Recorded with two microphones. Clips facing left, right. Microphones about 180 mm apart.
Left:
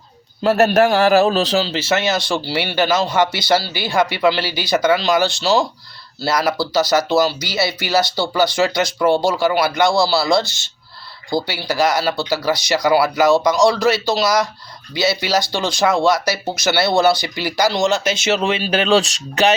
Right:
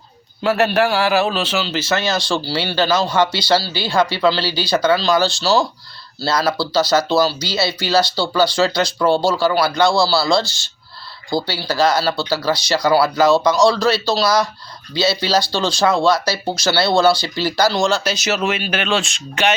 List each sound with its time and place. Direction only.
0.4 s a man's voice: 40° left (ahead or behind)